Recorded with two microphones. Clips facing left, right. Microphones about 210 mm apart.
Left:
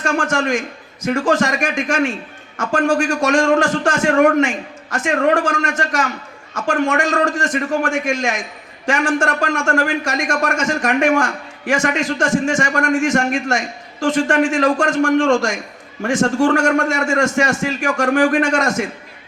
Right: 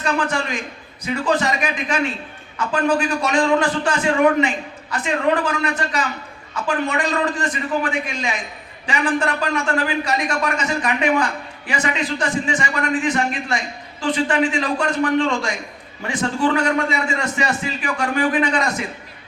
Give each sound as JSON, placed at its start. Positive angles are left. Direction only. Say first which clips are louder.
{"t": 0.0, "sound": "a man's voice", "louder": "left 3 dB", "side_deg": 45}